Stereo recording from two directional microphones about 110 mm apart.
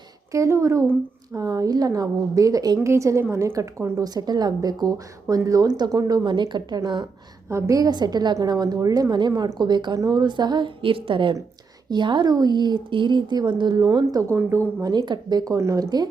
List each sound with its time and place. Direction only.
0.3 s a woman's voice: 25° right (ahead or behind); by 7.1 s 40° right (ahead or behind)
7.5 s a woman's voice: 30° right (ahead or behind)
14.8 s a woman's voice: 40° right (ahead or behind)